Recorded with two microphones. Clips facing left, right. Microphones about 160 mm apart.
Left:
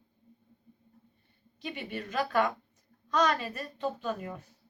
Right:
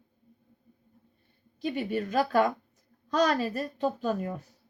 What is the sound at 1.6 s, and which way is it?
A woman's voice, 35° right (ahead or behind).